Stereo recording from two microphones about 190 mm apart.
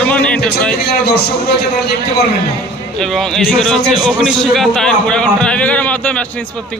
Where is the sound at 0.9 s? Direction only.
60° left (ahead or behind).